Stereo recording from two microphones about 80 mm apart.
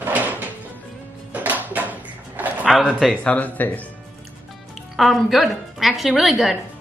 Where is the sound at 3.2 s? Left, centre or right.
Centre.